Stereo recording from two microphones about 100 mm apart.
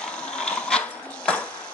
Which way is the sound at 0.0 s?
10° left (ahead or behind).